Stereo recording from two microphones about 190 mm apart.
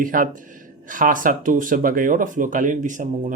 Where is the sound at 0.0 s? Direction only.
45° right (ahead or behind).